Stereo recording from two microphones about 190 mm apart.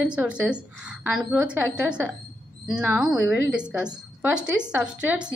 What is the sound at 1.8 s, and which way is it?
A woman's voice, 5° right (ahead or behind).